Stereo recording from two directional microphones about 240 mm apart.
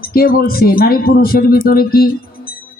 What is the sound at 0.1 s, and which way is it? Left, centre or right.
Speech, left.